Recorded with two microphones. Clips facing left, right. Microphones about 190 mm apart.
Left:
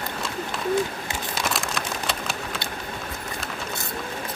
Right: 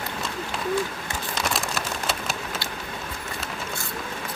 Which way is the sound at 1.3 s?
Centre (ahead or behind).